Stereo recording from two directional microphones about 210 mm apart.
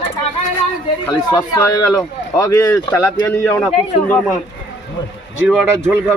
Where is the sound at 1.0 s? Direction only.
20° left (ahead or behind).